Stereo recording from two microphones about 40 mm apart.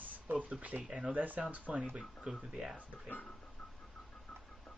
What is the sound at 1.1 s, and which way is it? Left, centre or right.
Speech, right.